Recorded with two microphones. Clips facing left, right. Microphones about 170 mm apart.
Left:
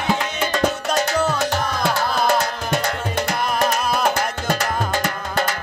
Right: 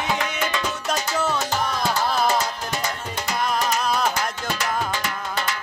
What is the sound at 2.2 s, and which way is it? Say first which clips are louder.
Music: left 3 dB; 65° left (ahead or behind).